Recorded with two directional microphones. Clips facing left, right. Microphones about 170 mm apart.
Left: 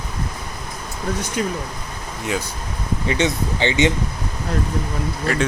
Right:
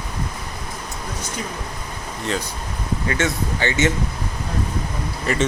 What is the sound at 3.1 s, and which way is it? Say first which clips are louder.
Speech: left 3 dB; 20° left (ahead or behind).